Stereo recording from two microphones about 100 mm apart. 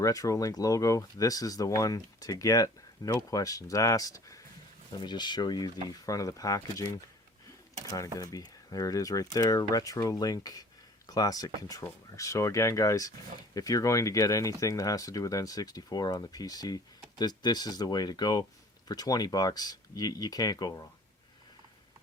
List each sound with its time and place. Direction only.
0.0 s speech: 35° left (ahead or behind)
4.9 s speech: 50° left (ahead or behind)
7.9 s speech: 35° left (ahead or behind)